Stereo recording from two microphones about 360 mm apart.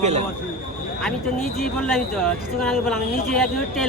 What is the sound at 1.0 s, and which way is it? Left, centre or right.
Speech, centre.